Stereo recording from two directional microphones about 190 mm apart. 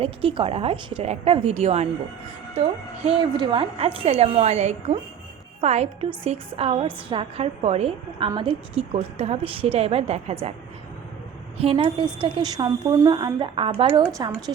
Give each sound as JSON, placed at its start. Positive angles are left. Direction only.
{"t": 0.0, "sound": "a woman's voice", "side_deg": -30}
{"t": 11.6, "sound": "a woman's voice", "side_deg": -30}